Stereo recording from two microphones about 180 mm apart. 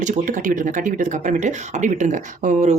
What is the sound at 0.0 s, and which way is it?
Speech, 45° right (ahead or behind).